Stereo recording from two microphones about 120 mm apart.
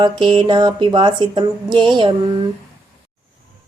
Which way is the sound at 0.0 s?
40° right (ahead or behind).